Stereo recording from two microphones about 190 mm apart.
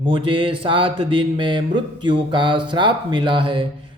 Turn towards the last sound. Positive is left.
turn(degrees=-25)  # may be behind; listen again after turning